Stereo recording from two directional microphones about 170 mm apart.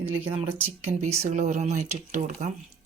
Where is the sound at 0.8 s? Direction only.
40° right (ahead or behind).